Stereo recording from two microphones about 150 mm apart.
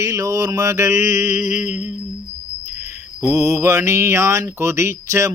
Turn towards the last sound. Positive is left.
turn(degrees=-20)  # may be behind; listen again after turning